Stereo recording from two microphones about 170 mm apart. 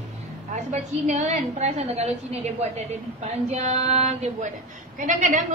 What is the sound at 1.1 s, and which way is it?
A woman's voice, 40° right (ahead or behind).